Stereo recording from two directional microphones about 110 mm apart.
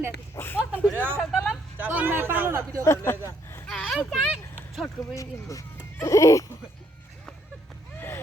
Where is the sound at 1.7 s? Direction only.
15° right (ahead or behind).